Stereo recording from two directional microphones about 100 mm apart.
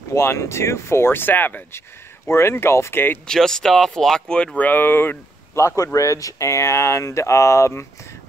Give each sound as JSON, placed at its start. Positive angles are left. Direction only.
{"t": 0.1, "sound": "speech", "side_deg": 30}
{"t": 3.3, "sound": "speech", "side_deg": 5}